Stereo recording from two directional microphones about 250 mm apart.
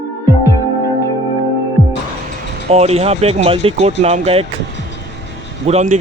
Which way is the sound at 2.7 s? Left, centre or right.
Right.